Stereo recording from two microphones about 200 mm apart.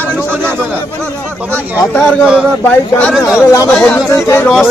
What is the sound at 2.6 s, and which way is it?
Speech, 5° left (ahead or behind).